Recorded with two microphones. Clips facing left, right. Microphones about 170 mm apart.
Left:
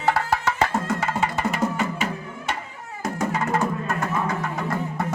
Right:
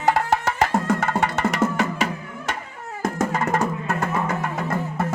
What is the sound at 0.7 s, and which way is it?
Music, 55° right (ahead or behind).